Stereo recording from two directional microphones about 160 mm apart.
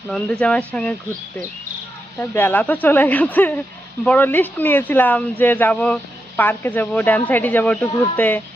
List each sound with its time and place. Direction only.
0.1 s speech: 5° left (ahead or behind)
2.1 s speech: 10° left (ahead or behind)